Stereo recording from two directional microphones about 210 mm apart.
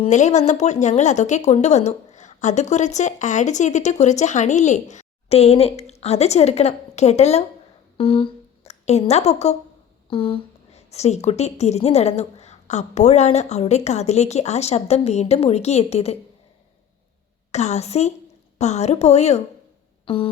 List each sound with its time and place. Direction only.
0.0 s a woman's voice: 35° left (ahead or behind)
17.5 s speech: 30° left (ahead or behind)
20.1 s a sound: 25° left (ahead or behind)